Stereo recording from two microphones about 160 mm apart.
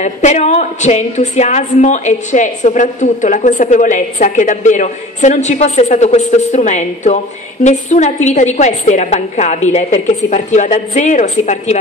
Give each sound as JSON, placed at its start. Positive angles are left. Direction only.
{"t": 0.0, "sound": "a woman's voice", "side_deg": 45}